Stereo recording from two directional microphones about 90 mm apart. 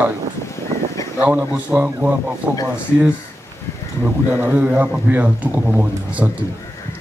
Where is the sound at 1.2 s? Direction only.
20° right (ahead or behind).